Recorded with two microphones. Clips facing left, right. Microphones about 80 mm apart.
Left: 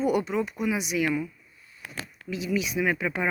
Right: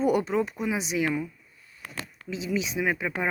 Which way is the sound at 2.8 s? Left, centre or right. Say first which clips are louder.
Left 1 dB; centre.